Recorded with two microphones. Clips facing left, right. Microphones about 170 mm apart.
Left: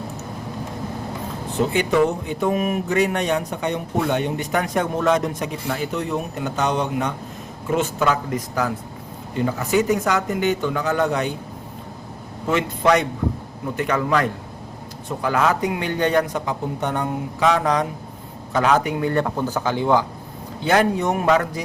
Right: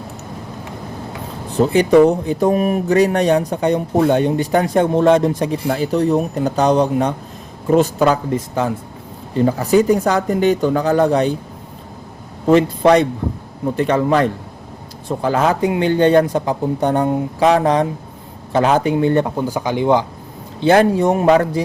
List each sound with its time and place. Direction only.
1.5 s speech: 35° right (ahead or behind)
12.5 s speech: 35° right (ahead or behind)
20.6 s speech: 30° right (ahead or behind)